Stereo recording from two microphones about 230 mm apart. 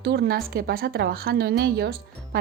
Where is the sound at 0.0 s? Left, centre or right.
Right.